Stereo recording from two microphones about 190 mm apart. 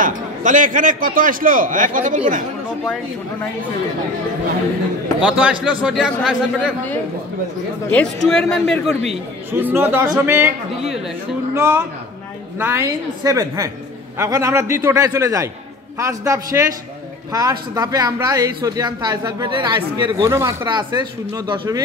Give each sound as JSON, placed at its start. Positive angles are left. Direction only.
{"t": 0.0, "sound": "a man's voice", "side_deg": -45}
{"t": 5.2, "sound": "a man's voice", "side_deg": -5}
{"t": 7.9, "sound": "a man's voice", "side_deg": 5}
{"t": 9.5, "sound": "a man's voice", "side_deg": -10}
{"t": 11.5, "sound": "a man's voice", "side_deg": -15}
{"t": 20.2, "sound": "a man's voice", "side_deg": -15}